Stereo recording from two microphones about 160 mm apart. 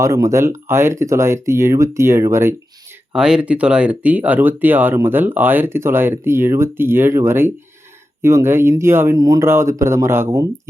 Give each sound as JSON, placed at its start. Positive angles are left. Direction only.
{"t": 0.0, "sound": "speech", "side_deg": -20}
{"t": 3.1, "sound": "speech", "side_deg": -5}